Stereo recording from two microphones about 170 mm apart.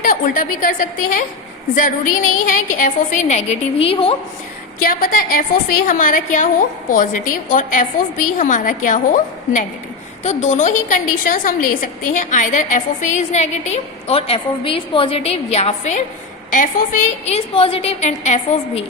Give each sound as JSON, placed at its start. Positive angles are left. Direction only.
{"t": 0.0, "sound": "a woman's voice", "side_deg": 50}
{"t": 4.8, "sound": "a woman's voice", "side_deg": 55}